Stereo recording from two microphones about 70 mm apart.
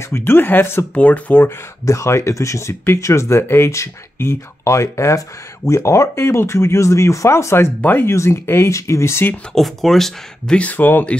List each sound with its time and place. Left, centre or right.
0.1 s speech: left
0.9 s speech: left
1.9 s speech: left
7.8 s speech: left
8.1 s speech: left
9.6 s speech: centre
10.6 s speech: left